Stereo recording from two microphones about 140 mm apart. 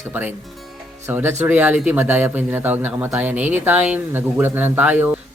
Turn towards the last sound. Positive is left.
turn(degrees=-15)  # may be behind; listen again after turning